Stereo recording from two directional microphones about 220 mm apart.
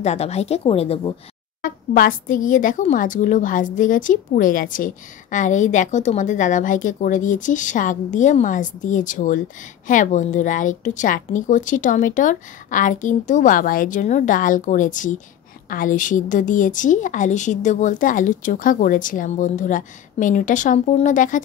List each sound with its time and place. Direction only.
0.0 s a woman's voice: 30° left (ahead or behind)
1.6 s speech: 40° left (ahead or behind)